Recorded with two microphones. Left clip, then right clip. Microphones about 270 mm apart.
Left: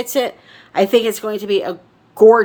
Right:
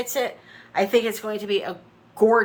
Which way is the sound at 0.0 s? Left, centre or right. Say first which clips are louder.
Left 7 dB; left.